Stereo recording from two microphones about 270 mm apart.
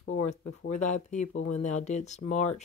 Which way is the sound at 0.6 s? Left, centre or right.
Left.